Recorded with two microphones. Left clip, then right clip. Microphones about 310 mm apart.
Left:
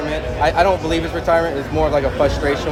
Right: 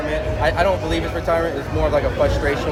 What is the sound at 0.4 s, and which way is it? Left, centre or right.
Speech, left.